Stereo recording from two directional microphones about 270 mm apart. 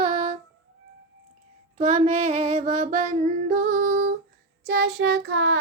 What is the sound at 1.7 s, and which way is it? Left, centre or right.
Child singing, right.